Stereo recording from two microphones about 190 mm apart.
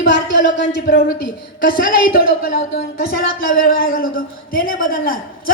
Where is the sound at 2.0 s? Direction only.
50° left (ahead or behind).